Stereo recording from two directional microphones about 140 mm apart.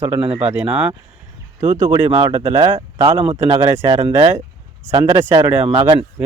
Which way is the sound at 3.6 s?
20° right (ahead or behind).